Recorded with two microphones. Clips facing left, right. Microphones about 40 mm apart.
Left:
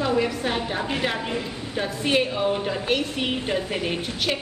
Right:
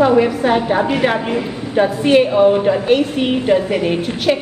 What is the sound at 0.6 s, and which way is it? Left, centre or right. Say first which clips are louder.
Speech: right 10 dB; right.